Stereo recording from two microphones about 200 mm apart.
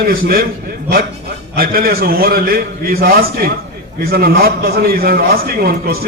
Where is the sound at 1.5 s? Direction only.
50° right (ahead or behind).